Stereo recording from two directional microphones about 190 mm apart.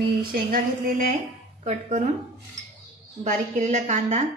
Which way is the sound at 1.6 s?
40° right (ahead or behind).